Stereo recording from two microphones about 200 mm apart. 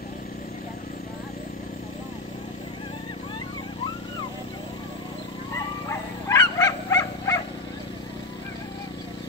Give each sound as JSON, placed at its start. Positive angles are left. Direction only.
{"t": 5.9, "sound": "wild animals", "side_deg": 15}